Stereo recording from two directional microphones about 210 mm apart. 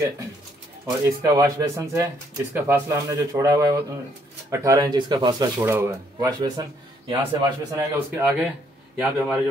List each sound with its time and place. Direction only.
1.0 s a man's voice: 15° right (ahead or behind)